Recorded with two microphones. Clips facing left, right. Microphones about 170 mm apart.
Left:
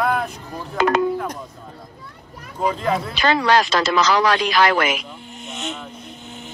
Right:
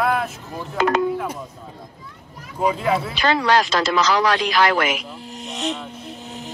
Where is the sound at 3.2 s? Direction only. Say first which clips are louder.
Left 1 dB; 70° left (ahead or behind).